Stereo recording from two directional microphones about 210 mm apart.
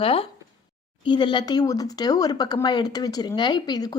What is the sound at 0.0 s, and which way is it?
Speech, 25° left (ahead or behind).